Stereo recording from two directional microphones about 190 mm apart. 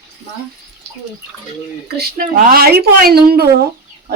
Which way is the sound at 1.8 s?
60° right (ahead or behind).